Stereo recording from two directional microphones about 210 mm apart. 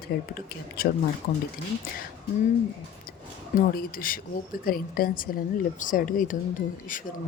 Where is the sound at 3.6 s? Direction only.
45° left (ahead or behind).